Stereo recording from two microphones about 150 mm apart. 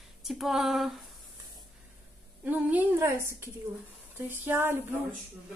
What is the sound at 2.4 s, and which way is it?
A woman's voice, 10° right (ahead or behind).